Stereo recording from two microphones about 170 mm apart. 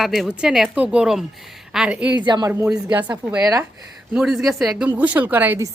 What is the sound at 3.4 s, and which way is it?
Speech, 20° right (ahead or behind).